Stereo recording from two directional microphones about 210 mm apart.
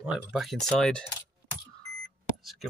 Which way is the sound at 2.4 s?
Centre (ahead or behind).